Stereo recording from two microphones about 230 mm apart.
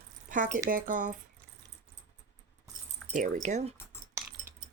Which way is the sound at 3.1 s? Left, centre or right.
Right.